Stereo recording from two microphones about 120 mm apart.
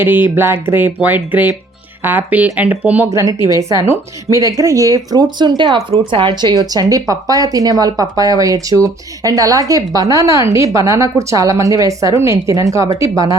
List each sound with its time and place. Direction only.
0.0 s speech: 15° right (ahead or behind)
3.1 s speech: 25° right (ahead or behind)